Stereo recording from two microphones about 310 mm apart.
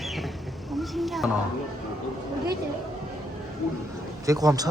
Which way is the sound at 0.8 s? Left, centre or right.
Centre.